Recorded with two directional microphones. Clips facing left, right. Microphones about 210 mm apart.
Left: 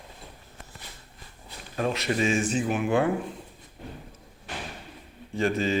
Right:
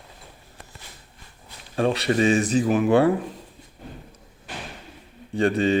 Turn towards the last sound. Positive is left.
turn(degrees=-35)  # may be behind; listen again after turning